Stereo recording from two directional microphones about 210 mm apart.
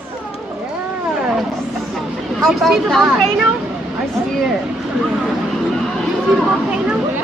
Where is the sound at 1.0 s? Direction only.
5° right (ahead or behind).